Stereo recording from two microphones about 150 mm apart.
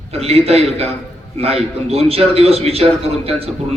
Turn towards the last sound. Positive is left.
turn(degrees=-40)  # may be behind; listen again after turning